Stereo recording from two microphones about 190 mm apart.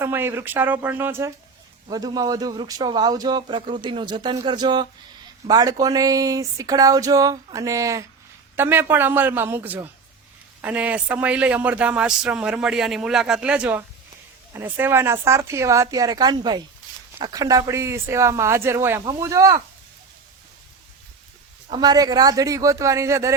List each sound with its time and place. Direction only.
0.0 s speech: 10° right (ahead or behind)
21.7 s speech: 20° right (ahead or behind)